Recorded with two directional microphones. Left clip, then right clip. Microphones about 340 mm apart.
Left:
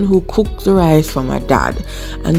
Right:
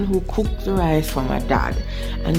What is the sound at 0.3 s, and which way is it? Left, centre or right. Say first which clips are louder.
Speech: left 9 dB; left.